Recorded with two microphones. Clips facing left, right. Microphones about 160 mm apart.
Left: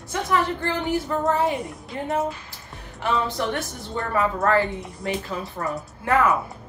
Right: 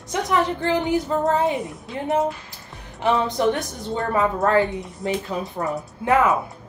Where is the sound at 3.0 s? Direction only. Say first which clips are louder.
Right 5 dB; 20° right (ahead or behind).